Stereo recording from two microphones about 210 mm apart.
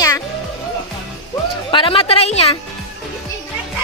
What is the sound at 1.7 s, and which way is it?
Speech, 25° left (ahead or behind).